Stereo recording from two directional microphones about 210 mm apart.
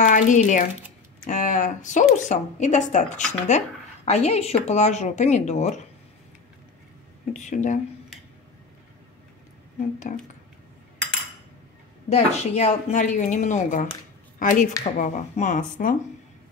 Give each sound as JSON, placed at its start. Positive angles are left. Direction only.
{"t": 0.0, "sound": "speech", "side_deg": 35}
{"t": 7.3, "sound": "speech", "side_deg": 35}
{"t": 10.1, "sound": "speech", "side_deg": 35}
{"t": 12.1, "sound": "speech", "side_deg": 30}